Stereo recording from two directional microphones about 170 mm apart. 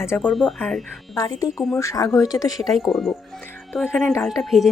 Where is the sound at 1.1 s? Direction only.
20° left (ahead or behind).